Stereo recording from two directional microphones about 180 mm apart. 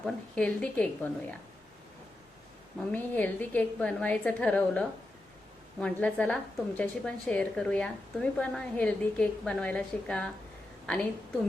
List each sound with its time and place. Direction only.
0.0 s a woman's voice: 5° left (ahead or behind)
2.9 s a woman's voice: 10° left (ahead or behind)